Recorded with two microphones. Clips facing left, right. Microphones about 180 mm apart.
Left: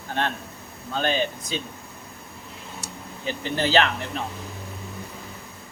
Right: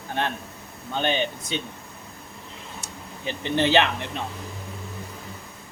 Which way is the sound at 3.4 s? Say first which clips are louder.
Right 1 dB; 20° right (ahead or behind).